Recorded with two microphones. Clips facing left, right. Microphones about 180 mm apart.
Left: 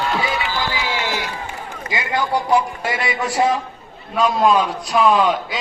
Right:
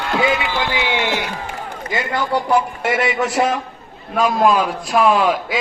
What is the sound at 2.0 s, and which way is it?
A man's voice, 65° right (ahead or behind).